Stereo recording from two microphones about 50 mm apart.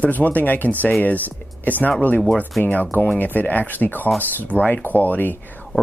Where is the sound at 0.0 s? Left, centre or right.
Left.